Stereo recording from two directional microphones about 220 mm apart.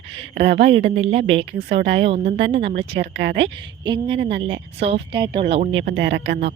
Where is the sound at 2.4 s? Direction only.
50° right (ahead or behind).